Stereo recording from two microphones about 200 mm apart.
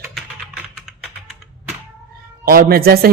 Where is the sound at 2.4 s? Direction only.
50° right (ahead or behind).